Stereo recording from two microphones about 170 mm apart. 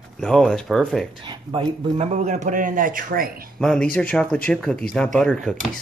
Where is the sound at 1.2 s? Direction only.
30° right (ahead or behind); by 3.3 s 55° right (ahead or behind).